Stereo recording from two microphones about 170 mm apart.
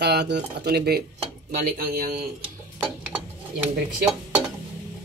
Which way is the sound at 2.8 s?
5° right (ahead or behind).